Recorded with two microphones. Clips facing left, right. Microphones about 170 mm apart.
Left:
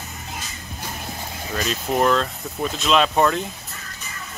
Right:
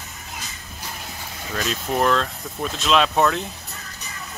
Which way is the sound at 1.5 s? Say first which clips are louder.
Left 1 dB; centre (ahead or behind).